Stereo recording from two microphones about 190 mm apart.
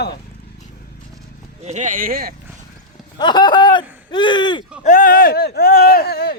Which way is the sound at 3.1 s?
20° left (ahead or behind).